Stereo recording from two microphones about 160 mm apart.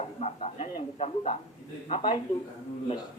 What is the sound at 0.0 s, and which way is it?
A man's voice, 40° left (ahead or behind).